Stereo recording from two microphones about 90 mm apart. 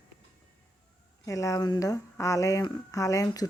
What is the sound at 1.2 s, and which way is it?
Speech, 40° left (ahead or behind).